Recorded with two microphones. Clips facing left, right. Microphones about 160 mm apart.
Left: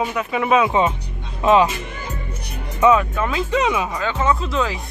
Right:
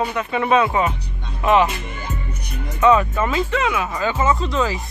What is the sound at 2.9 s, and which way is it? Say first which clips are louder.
Speech: right 1 dB; centre (ahead or behind).